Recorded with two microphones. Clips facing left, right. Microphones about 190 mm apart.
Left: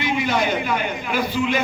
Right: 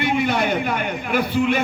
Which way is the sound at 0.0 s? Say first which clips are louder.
Right 1 dB; 60° right (ahead or behind).